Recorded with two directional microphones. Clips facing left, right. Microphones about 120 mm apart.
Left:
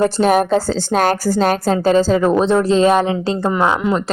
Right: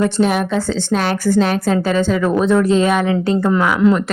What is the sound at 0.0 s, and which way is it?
A woman's voice, 40° left (ahead or behind).